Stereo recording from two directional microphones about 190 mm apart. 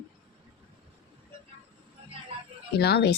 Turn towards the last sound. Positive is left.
turn(degrees=60)  # may be behind; listen again after turning